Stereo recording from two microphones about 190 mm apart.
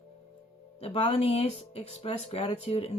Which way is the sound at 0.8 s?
30° left (ahead or behind).